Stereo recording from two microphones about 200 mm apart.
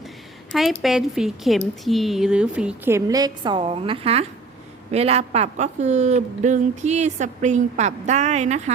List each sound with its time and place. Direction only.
0.5 s a woman's voice: centre (ahead or behind); by 8.7 s 35° right (ahead or behind)